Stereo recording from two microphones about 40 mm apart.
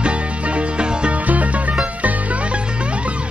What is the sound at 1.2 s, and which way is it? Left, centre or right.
Music, right.